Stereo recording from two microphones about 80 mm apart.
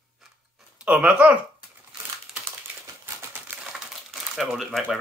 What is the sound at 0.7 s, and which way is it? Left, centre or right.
Speech, centre.